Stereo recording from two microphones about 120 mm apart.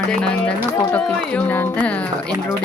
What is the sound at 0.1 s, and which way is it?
Speech, 5° left (ahead or behind).